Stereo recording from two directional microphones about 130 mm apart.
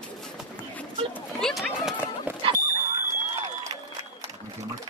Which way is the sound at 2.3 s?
15° right (ahead or behind).